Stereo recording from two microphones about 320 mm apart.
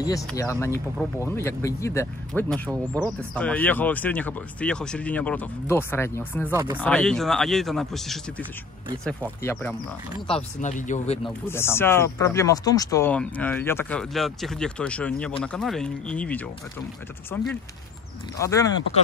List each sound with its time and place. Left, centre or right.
0.0 s speech: centre
6.5 s speech: centre
6.8 s speech: centre
10.2 s speech: centre
11.2 s speech: centre